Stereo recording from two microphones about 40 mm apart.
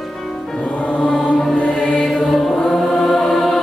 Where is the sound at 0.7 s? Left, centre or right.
Left.